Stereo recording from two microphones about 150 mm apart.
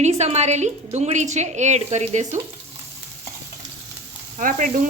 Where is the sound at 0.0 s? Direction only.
50° right (ahead or behind).